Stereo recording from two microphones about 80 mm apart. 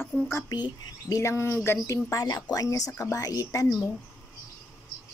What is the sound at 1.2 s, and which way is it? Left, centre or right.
A woman's voice, left.